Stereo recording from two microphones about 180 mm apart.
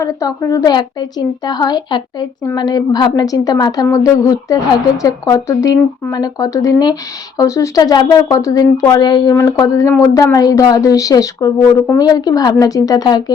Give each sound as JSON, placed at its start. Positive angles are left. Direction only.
{"t": 0.0, "sound": "speech", "side_deg": 20}